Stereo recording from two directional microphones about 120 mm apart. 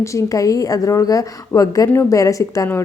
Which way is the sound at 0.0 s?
25° left (ahead or behind).